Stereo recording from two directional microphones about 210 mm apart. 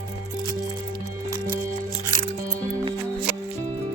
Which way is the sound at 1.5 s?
40° right (ahead or behind).